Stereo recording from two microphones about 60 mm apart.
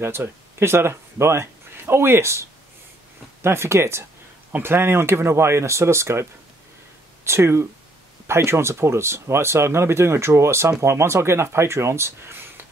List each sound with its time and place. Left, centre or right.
0.0 s speech: right
3.4 s speech: right
4.5 s speech: right
7.2 s speech: right